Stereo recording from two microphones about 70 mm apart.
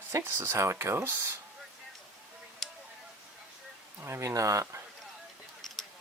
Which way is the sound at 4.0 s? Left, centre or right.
Right.